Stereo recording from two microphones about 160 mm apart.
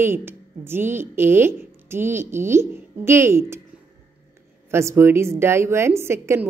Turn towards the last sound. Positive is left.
turn(degrees=-15)  # may be behind; listen again after turning